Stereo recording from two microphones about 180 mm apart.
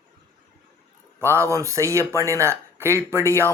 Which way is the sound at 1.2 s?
15° right (ahead or behind).